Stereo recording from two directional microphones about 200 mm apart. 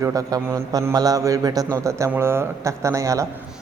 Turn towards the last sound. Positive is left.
turn(degrees=-15)  # may be behind; listen again after turning